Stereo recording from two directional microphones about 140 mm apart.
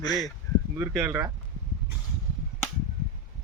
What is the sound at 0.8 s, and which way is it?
Speech, 15° right (ahead or behind).